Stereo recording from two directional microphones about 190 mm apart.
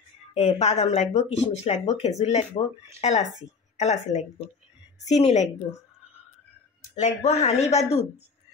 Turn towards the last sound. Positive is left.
turn(degrees=35)  # may be behind; listen again after turning